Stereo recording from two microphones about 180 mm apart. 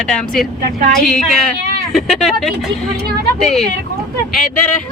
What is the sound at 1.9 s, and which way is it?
Speech, centre (ahead or behind).